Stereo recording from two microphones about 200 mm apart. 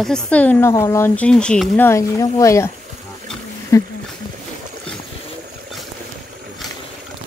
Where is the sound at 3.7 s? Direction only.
15° left (ahead or behind).